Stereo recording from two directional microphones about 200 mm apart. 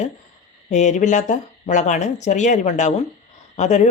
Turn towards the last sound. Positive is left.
turn(degrees=35)  # may be behind; listen again after turning